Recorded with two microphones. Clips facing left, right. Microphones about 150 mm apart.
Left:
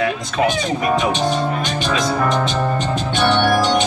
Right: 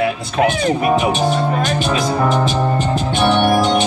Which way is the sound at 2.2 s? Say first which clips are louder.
Right 2 dB; 10° right (ahead or behind).